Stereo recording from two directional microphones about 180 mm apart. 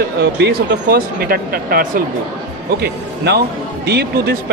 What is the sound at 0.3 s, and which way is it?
Speech, 65° right (ahead or behind).